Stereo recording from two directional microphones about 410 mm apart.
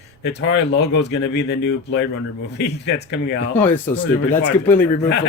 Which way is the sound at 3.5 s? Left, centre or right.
Centre.